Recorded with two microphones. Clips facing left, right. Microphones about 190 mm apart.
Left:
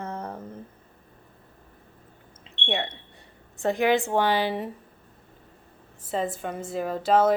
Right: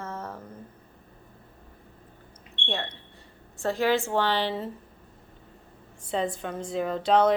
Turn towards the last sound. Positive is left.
turn(degrees=5)  # may be behind; listen again after turning